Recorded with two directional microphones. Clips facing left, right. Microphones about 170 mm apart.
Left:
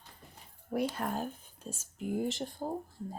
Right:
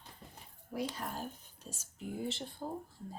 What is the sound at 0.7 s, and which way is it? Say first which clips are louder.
Speech: left 6 dB; 55° left (ahead or behind).